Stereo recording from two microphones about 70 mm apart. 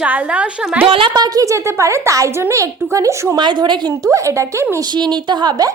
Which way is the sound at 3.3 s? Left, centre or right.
Right.